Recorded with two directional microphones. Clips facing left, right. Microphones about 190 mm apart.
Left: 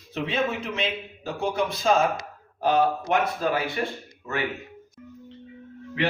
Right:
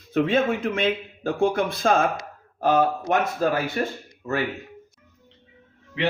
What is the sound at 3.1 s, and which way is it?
A man's voice, 45° right (ahead or behind).